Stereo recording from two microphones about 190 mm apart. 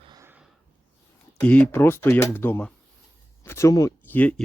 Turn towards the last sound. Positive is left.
turn(degrees=10)  # may be behind; listen again after turning